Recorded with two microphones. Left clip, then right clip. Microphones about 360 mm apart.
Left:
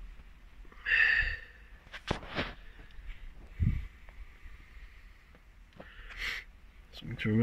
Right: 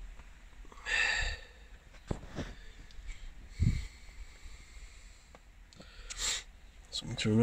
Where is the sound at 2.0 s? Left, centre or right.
Left.